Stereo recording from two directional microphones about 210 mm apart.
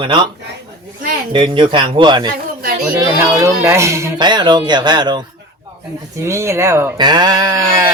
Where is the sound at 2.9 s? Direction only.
10° right (ahead or behind).